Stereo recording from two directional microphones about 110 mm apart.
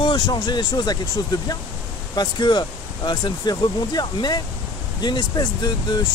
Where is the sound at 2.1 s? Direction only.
40° left (ahead or behind).